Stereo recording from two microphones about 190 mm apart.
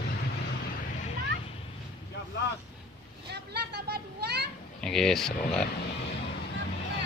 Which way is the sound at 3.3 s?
60° right (ahead or behind).